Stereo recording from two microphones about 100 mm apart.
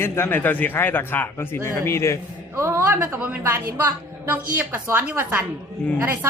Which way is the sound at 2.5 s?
25° right (ahead or behind).